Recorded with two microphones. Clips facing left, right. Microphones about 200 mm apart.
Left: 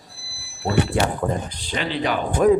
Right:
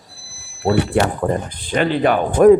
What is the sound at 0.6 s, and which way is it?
A man's voice, 55° right (ahead or behind).